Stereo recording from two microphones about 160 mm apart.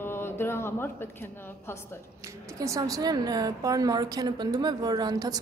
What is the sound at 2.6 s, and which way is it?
A woman's voice, 20° right (ahead or behind).